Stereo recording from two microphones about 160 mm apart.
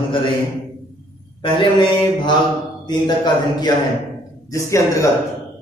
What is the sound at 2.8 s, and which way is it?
A man's voice, 25° left (ahead or behind).